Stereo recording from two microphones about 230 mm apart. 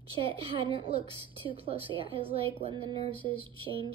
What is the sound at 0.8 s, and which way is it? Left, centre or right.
A woman's voice, right.